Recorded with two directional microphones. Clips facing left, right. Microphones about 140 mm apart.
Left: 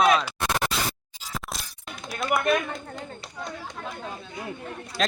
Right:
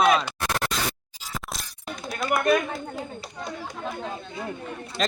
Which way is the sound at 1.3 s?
Centre (ahead or behind).